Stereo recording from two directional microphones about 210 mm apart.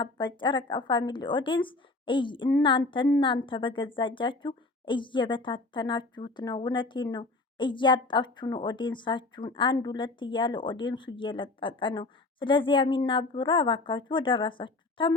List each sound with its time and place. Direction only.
0.0 s a woman's voice: 20° left (ahead or behind)